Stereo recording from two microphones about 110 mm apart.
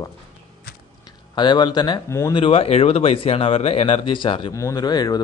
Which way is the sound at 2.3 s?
55° left (ahead or behind).